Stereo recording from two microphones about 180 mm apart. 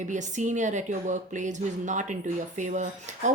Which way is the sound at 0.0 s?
45° right (ahead or behind).